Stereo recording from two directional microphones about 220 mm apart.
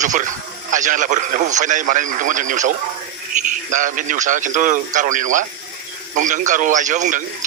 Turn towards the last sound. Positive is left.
turn(degrees=-35)  # may be behind; listen again after turning